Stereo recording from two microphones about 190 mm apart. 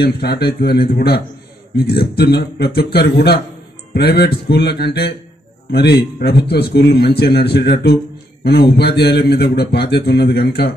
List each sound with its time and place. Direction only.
0.0 s a man's voice: 55° left (ahead or behind)